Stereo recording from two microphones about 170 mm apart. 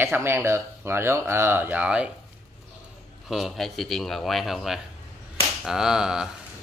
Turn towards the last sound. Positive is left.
turn(degrees=-5)  # may be behind; listen again after turning